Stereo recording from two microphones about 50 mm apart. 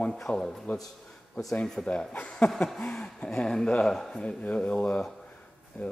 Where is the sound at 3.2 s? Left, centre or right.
Centre.